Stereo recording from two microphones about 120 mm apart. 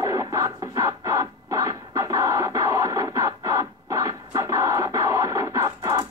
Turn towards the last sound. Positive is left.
turn(degrees=-30)  # may be behind; listen again after turning